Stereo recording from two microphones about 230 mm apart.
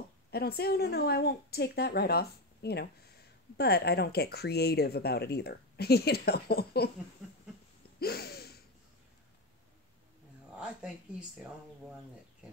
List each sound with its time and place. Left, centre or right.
0.3 s speech: left
8.0 s a sound: left
10.6 s speech: centre